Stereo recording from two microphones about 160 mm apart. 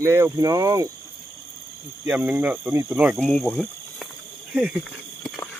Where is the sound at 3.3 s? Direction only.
5° left (ahead or behind).